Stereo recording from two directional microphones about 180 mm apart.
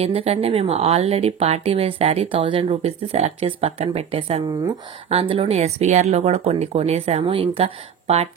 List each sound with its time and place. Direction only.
0.0 s speech: 35° right (ahead or behind)